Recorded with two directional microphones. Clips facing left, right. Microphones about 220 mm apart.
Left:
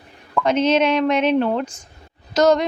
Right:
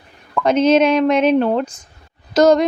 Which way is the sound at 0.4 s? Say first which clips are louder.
Right 4 dB; 45° right (ahead or behind).